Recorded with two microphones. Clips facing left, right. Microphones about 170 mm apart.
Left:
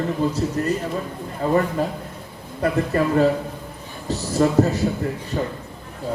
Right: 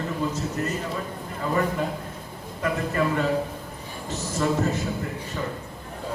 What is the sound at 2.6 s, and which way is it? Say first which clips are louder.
Speech: left 5 dB; 35° left (ahead or behind).